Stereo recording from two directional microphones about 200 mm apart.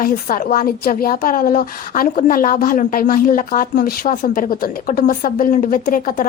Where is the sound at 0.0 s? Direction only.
45° left (ahead or behind).